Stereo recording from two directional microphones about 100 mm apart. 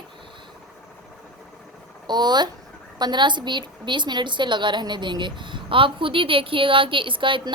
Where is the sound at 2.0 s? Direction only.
45° right (ahead or behind).